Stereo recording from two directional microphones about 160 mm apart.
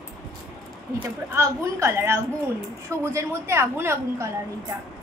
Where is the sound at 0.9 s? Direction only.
20° right (ahead or behind).